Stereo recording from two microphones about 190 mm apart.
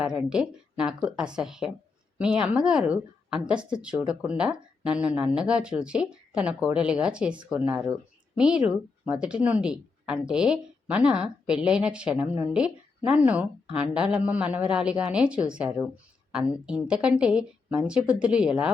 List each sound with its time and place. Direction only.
0.0 s speech: 5° right (ahead or behind)